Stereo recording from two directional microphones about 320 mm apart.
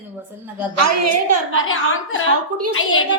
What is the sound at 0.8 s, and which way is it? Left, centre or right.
Speech, right.